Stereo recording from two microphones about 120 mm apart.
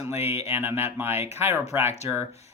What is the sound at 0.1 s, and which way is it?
Speech, 60° left (ahead or behind).